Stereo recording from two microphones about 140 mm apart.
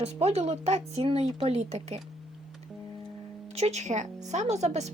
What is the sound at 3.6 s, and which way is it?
Speech, 55° right (ahead or behind).